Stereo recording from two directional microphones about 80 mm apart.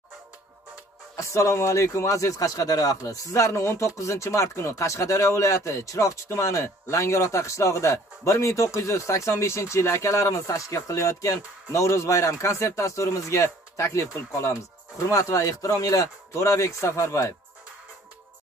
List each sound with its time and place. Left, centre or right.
1.1 s a man's voice: left